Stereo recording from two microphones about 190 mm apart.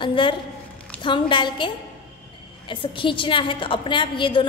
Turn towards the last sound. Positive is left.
turn(degrees=25)  # may be behind; listen again after turning